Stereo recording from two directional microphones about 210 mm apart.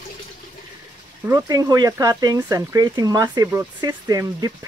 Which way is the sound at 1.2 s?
15° right (ahead or behind).